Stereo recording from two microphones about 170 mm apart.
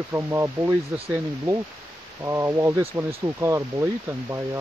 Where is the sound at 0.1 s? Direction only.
15° right (ahead or behind).